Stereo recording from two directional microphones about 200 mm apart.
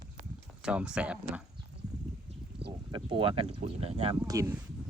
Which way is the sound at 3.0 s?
25° right (ahead or behind).